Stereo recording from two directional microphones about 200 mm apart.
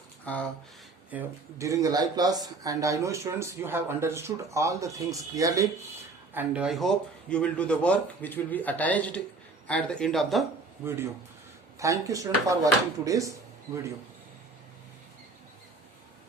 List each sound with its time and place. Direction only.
0.3 s speech: 5° left (ahead or behind)
1.1 s speech: 15° right (ahead or behind); by 10.4 s centre (ahead or behind)
10.8 s speech: 10° right (ahead or behind)